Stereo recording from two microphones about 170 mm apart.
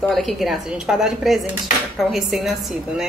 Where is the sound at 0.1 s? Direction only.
Centre (ahead or behind).